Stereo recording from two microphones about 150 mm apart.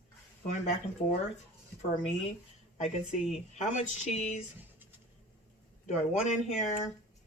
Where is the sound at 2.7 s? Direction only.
50° left (ahead or behind).